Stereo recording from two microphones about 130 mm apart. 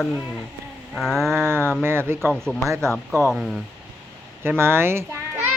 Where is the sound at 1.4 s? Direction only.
20° right (ahead or behind).